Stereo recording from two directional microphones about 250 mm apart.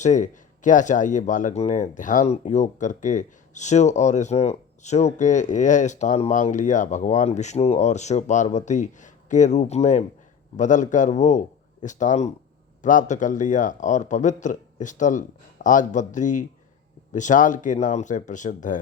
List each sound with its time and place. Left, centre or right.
0.0 s speech: left